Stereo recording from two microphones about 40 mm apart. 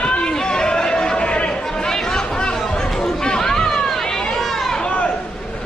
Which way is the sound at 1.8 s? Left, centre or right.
Centre.